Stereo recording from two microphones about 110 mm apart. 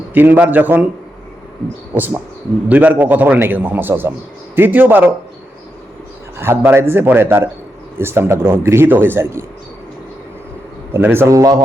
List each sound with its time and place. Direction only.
0.1 s a man's voice: 15° right (ahead or behind)
1.9 s a man's voice: 15° right (ahead or behind)
6.4 s speech: 20° right (ahead or behind)
10.9 s speech: 20° right (ahead or behind)
11.3 s a man's voice: 30° right (ahead or behind)